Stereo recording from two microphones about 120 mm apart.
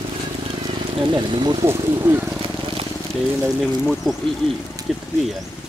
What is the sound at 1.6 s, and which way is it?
Speech, 20° right (ahead or behind).